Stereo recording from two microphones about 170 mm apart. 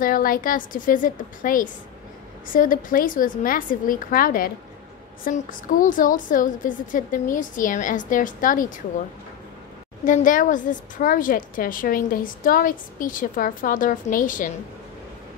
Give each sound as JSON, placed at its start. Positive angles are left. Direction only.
{"t": 0.0, "sound": "a woman's voice", "side_deg": 55}
{"t": 10.0, "sound": "a woman's voice", "side_deg": 50}